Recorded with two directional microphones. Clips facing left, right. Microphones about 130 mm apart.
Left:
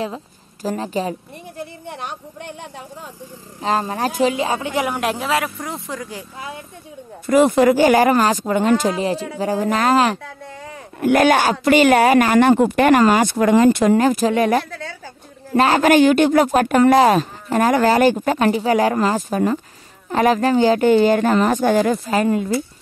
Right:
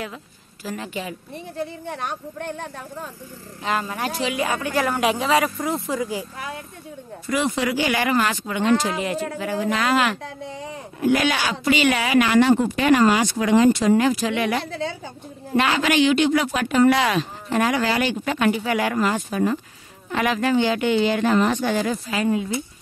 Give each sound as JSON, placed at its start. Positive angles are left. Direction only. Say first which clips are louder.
{"t": 0.0, "sound": "a woman's voice", "louder": "left 7 dB", "side_deg": 35}
{"t": 2.0, "sound": "speech", "louder": "right 2 dB", "side_deg": 15}
{"t": 3.6, "sound": "speech", "louder": "left 5 dB", "side_deg": 35}
{"t": 4.4, "sound": "speech", "louder": "left 2 dB", "side_deg": 25}
{"t": 4.9, "sound": "speech", "louder": "right 1 dB", "side_deg": 0}
{"t": 7.2, "sound": "speech", "louder": "left 10 dB", "side_deg": 50}
{"t": 11.0, "sound": "speech", "louder": "left 6 dB", "side_deg": 55}
{"t": 14.7, "sound": "a woman's voice", "louder": "right 4 dB", "side_deg": -25}
{"t": 15.5, "sound": "speech", "louder": "left 6 dB", "side_deg": 40}